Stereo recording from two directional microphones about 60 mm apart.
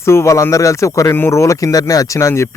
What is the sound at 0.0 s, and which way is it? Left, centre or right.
Speech, left.